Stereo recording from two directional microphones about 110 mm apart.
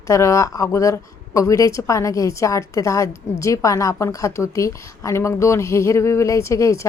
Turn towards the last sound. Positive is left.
turn(degrees=30)  # may be behind; listen again after turning